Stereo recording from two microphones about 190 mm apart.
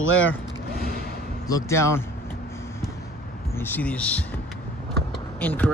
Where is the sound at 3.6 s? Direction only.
10° left (ahead or behind).